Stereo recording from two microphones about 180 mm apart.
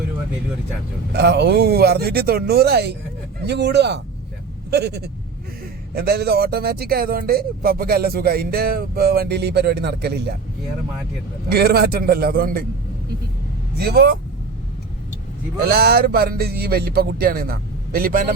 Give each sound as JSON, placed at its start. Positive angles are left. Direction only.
{"t": 1.1, "sound": "speech", "side_deg": -65}
{"t": 11.4, "sound": "speech", "side_deg": -60}
{"t": 13.7, "sound": "speech", "side_deg": -60}
{"t": 15.6, "sound": "speech", "side_deg": -60}